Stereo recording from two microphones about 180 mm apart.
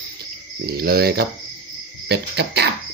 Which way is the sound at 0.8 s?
60° right (ahead or behind).